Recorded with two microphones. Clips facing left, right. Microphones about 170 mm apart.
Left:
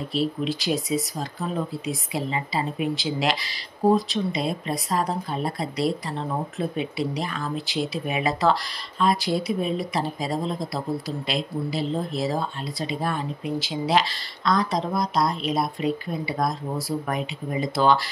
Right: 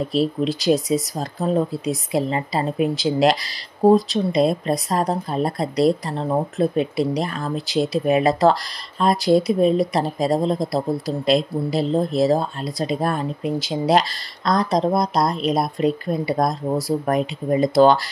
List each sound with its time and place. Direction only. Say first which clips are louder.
0.1 s speech: right 1 dB; 40° right (ahead or behind)